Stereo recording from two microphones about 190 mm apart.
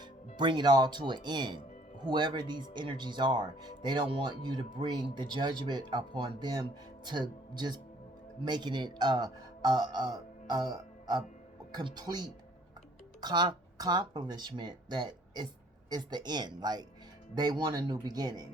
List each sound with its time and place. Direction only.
0.3 s speech: 25° right (ahead or behind)